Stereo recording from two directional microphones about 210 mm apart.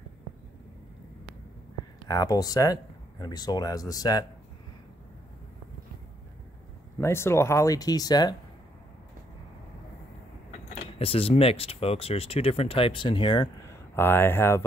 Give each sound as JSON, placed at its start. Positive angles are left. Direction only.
{"t": 2.0, "sound": "speech", "side_deg": 15}
{"t": 7.0, "sound": "speech", "side_deg": 10}
{"t": 10.7, "sound": "speech", "side_deg": 25}
{"t": 13.9, "sound": "speech", "side_deg": 10}